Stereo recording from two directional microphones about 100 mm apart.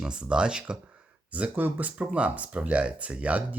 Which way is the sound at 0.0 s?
10° right (ahead or behind).